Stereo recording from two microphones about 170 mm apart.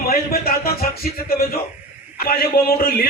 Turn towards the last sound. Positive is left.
turn(degrees=60)  # may be behind; listen again after turning